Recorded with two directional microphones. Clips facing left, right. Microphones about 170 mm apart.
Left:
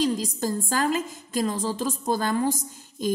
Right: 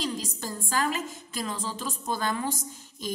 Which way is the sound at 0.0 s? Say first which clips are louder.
Left 8 dB; 40° left (ahead or behind).